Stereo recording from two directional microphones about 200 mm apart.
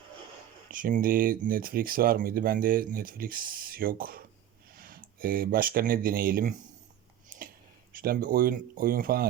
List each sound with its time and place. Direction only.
0.7 s speech: 40° right (ahead or behind)
7.3 s a sound: 45° right (ahead or behind)
7.9 s speech: 45° right (ahead or behind)